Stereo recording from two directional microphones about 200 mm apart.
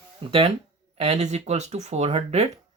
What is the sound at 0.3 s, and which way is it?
Speech, 30° right (ahead or behind).